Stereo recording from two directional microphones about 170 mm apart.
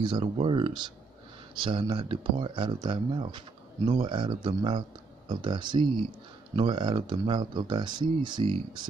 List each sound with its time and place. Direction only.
0.0 s speech: 30° right (ahead or behind)